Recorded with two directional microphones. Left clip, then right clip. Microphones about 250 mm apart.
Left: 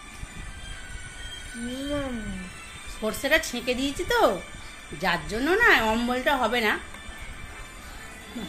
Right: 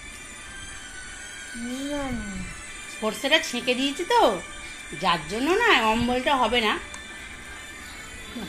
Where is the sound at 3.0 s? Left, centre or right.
Centre.